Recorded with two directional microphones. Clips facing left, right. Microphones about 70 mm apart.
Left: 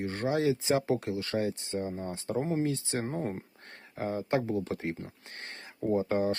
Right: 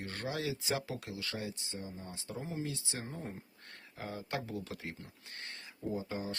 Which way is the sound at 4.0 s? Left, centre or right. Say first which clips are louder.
Left 10 dB; left.